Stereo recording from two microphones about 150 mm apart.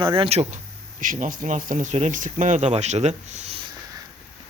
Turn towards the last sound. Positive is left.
turn(degrees=-45)  # may be behind; listen again after turning